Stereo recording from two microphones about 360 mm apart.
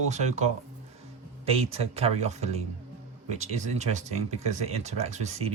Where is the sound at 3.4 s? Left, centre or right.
Centre.